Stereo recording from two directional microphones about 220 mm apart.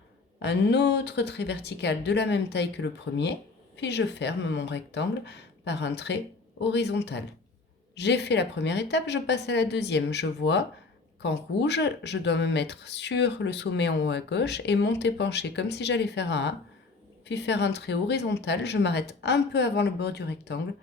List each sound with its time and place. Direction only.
0.4 s speech: 50° left (ahead or behind)